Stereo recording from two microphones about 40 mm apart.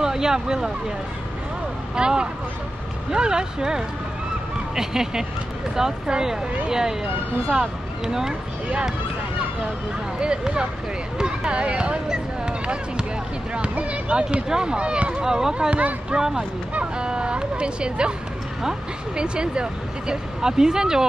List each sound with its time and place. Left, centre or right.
0.0 s speech: centre
2.0 s speech: right
10.2 s speech: right
13.6 s speech: right; by 21.1 s centre